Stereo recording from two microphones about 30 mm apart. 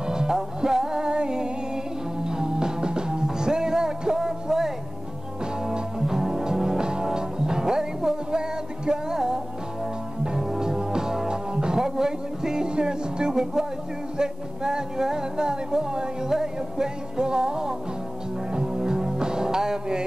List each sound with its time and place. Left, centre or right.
0.0 s music: right
6.8 s music: right
10.3 s music: centre